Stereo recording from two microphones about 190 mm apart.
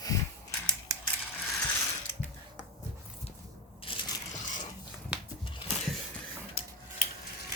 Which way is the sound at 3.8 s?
30° left (ahead or behind).